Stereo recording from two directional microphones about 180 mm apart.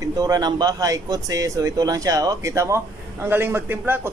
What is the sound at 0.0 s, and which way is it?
Speech, 20° right (ahead or behind).